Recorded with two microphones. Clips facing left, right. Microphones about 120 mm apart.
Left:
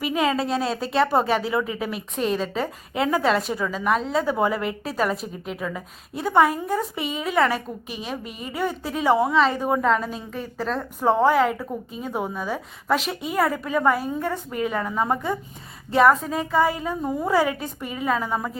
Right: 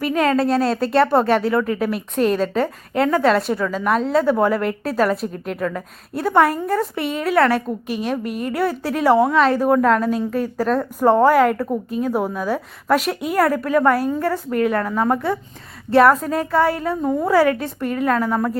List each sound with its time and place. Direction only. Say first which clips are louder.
0.0 s a woman's voice: right 5 dB; 5° left (ahead or behind)
8.2 s a woman's voice: right 10 dB; 55° right (ahead or behind)
8.5 s a woman's voice: right 4 dB; centre (ahead or behind)